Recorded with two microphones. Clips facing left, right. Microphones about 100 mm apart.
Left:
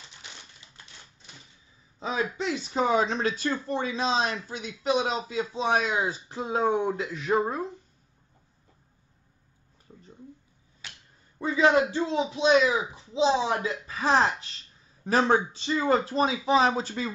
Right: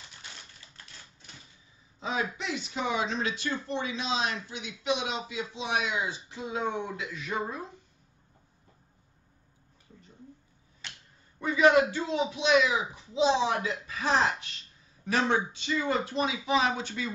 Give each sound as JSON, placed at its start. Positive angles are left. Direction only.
{"t": 2.0, "sound": "a sound", "side_deg": 30}
{"t": 2.3, "sound": "speech", "side_deg": 35}
{"t": 11.3, "sound": "a man's voice", "side_deg": 25}